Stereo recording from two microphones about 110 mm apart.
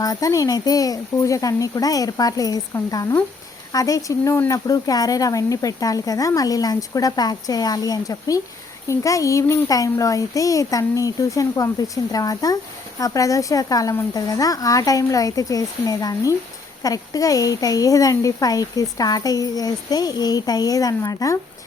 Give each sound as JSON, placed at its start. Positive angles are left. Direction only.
{"t": 0.0, "sound": "speech", "side_deg": 35}